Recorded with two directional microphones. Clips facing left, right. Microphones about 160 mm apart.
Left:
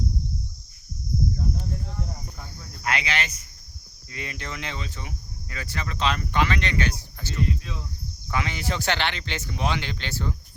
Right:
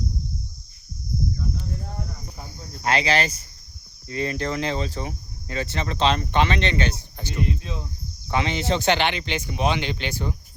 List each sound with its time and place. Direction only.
2.6 s cricket: 30° right (ahead or behind)
4.1 s speech: 35° right (ahead or behind); by 10.3 s 15° right (ahead or behind)